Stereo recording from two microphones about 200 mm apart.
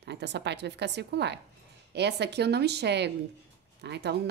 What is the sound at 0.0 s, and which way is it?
A woman's voice, 55° right (ahead or behind).